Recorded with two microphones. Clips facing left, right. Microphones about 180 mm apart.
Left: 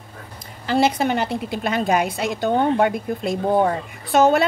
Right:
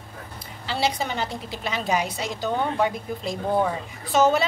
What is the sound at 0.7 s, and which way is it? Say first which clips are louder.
A woman's voice: left 7 dB; 50° left (ahead or behind).